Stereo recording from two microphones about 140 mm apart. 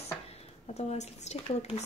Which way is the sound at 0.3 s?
50° left (ahead or behind).